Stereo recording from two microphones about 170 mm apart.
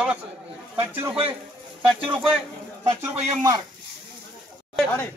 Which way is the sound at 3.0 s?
20° right (ahead or behind).